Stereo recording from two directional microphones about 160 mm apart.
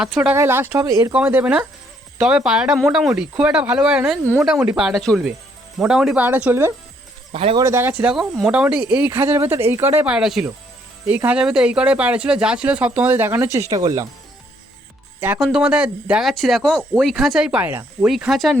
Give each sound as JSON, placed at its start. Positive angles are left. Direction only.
{"t": 0.0, "sound": "speech", "side_deg": -5}
{"t": 1.2, "sound": "speech", "side_deg": -10}
{"t": 7.3, "sound": "speech", "side_deg": -35}
{"t": 7.6, "sound": "speech", "side_deg": -15}
{"t": 15.4, "sound": "speech", "side_deg": 0}